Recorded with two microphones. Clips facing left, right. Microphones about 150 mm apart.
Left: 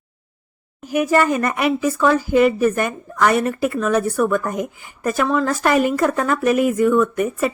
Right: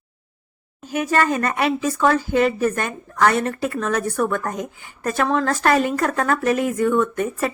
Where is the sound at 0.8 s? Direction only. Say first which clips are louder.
Left 3 dB; 10° left (ahead or behind).